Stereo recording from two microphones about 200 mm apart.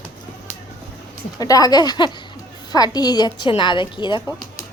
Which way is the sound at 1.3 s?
20° left (ahead or behind).